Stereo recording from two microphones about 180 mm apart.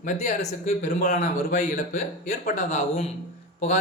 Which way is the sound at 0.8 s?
45° left (ahead or behind).